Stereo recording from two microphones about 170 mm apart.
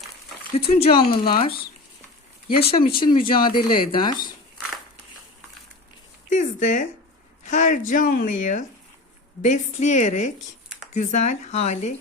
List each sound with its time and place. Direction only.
0.7 s speech: 35° left (ahead or behind)
2.6 s speech: 35° left (ahead or behind)
6.3 s speech: 45° left (ahead or behind)